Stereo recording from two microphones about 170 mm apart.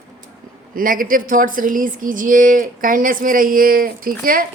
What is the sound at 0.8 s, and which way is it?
A woman's voice, 55° right (ahead or behind).